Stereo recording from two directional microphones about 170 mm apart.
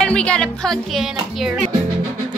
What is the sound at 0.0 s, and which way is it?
Speech, 5° left (ahead or behind).